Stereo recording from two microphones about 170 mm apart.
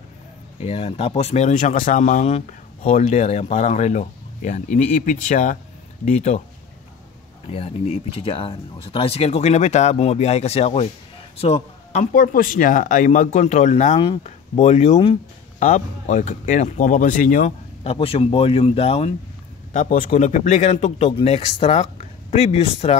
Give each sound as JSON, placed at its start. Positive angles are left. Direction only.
{"t": 0.6, "sound": "speech", "side_deg": 35}
{"t": 7.5, "sound": "speech", "side_deg": 35}
{"t": 13.9, "sound": "speech", "side_deg": 30}
{"t": 14.2, "sound": "speech", "side_deg": 40}
{"t": 17.9, "sound": "speech", "side_deg": 35}
{"t": 19.7, "sound": "speech", "side_deg": 50}